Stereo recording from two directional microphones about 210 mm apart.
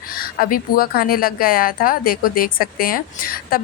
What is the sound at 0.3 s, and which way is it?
Speech, 45° left (ahead or behind).